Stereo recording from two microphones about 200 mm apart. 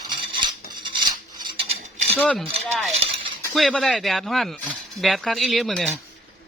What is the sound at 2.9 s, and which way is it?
Cutlery, 30° right (ahead or behind).